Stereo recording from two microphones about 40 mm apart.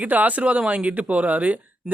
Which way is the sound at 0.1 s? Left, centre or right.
Right.